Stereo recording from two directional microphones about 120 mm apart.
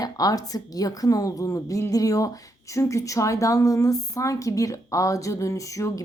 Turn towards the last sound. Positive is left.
turn(degrees=25)  # may be behind; listen again after turning